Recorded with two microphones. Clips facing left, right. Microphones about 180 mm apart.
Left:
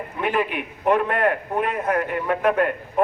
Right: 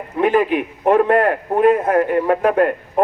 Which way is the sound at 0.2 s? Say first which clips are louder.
Right 8 dB; 40° right (ahead or behind).